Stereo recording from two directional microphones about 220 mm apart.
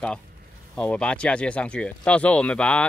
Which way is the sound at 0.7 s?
5° left (ahead or behind).